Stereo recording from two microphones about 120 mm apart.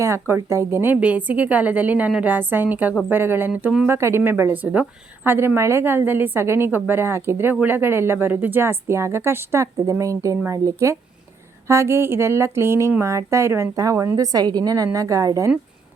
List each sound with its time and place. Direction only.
0.0 s a woman's voice: 25° right (ahead or behind)
3.8 s a woman's voice: 20° right (ahead or behind)